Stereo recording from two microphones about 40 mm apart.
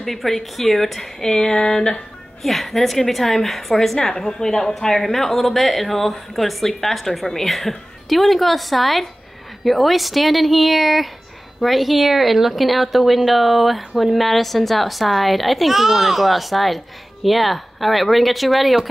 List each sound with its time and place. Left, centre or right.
0.0 s a woman's voice: centre
1.2 s a sound: centre
2.4 s a woman's voice: centre